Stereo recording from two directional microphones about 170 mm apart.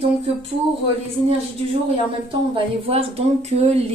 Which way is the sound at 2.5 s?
35° right (ahead or behind).